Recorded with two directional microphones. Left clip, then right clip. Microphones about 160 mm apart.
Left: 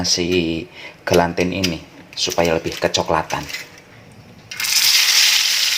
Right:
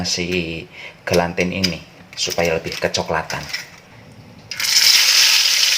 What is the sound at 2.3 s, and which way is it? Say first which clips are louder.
Speech: left 1 dB; 35° left (ahead or behind).